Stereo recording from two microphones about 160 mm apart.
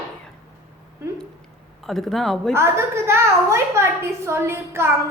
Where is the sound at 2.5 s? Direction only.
15° right (ahead or behind).